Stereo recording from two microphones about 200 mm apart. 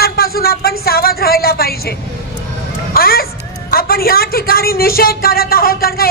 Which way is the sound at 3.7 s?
50° left (ahead or behind).